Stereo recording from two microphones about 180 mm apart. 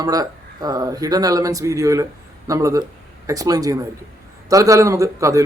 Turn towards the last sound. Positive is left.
turn(degrees=-15)  # may be behind; listen again after turning